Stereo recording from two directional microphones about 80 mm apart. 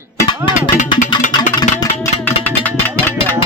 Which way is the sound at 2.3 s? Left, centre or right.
Left.